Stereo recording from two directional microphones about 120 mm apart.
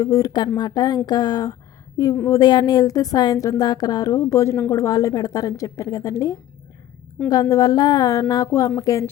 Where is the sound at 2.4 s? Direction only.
35° left (ahead or behind).